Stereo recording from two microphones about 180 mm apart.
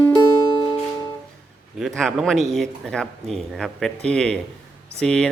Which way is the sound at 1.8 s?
Centre (ahead or behind).